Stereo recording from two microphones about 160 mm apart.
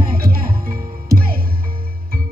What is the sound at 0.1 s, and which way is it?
Music, 65° right (ahead or behind).